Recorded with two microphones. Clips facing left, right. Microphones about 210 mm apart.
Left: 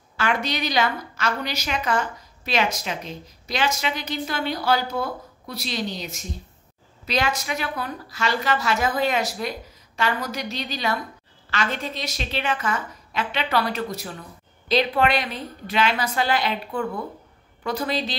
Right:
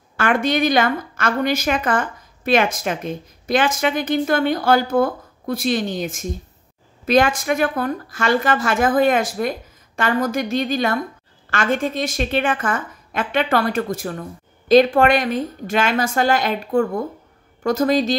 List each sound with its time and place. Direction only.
0.2 s a woman's voice: 50° right (ahead or behind)